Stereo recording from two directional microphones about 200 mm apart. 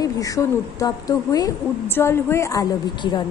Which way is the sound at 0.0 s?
15° left (ahead or behind).